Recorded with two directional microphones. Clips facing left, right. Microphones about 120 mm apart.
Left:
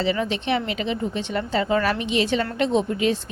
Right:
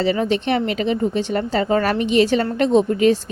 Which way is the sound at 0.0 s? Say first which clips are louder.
Right 5 dB; 45° right (ahead or behind).